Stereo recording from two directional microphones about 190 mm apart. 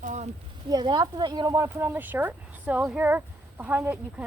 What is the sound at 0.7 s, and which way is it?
Speech, 20° right (ahead or behind).